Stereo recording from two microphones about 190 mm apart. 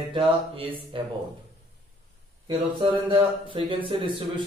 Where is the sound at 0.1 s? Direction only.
25° right (ahead or behind).